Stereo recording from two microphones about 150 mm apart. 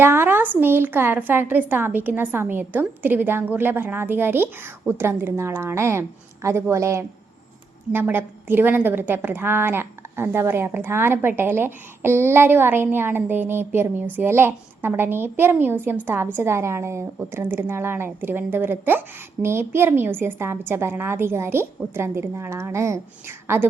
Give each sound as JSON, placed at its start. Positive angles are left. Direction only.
{"t": 0.0, "sound": "a woman's voice", "side_deg": -15}